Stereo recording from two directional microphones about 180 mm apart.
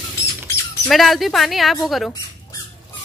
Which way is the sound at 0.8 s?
Centre (ahead or behind).